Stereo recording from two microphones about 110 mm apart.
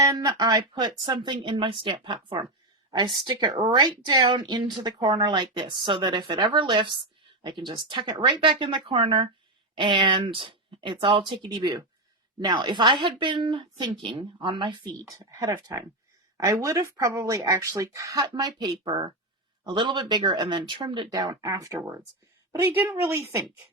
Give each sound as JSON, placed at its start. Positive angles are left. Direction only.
{"t": 0.1, "sound": "a woman's voice", "side_deg": -40}
{"t": 15.2, "sound": "a woman's voice", "side_deg": -30}